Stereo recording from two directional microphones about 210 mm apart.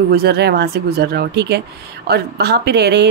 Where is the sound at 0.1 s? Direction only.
50° right (ahead or behind).